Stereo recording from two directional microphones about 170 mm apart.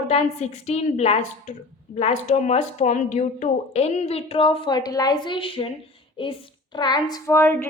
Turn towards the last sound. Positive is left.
turn(degrees=15)  # may be behind; listen again after turning